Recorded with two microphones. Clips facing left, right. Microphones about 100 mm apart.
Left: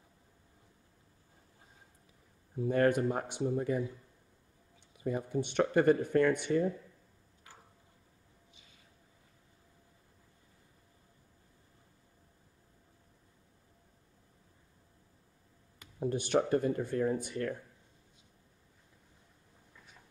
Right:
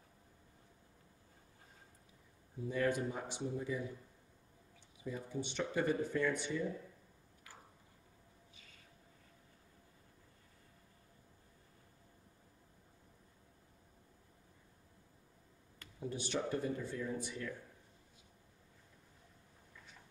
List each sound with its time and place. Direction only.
2.6 s speech: 55° left (ahead or behind)
4.9 s speech: 60° left (ahead or behind)
16.0 s speech: 55° left (ahead or behind)